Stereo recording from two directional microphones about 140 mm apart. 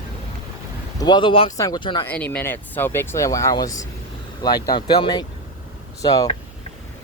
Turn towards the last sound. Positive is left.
turn(degrees=25)  # may be behind; listen again after turning